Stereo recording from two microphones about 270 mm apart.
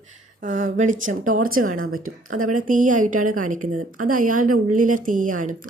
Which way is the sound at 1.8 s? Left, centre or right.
Right.